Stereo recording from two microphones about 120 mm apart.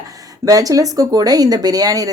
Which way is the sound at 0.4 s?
30° right (ahead or behind).